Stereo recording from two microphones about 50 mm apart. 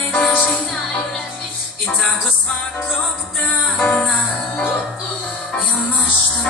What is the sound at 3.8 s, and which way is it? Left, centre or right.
Music, centre.